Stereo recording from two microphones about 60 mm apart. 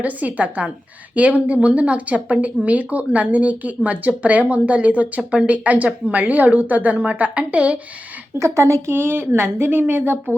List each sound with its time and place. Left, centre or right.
0.0 s speech: right
8.4 s speech: right
8.9 s a woman's voice: right